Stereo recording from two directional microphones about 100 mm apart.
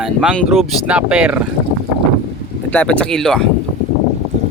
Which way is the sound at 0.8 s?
10° right (ahead or behind).